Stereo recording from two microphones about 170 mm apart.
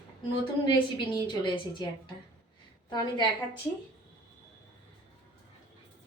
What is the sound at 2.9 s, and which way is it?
Speech, 25° left (ahead or behind).